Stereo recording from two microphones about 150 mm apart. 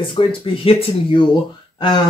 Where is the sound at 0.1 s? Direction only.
35° left (ahead or behind).